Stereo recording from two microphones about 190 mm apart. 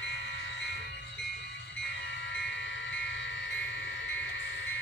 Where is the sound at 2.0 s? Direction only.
75° left (ahead or behind).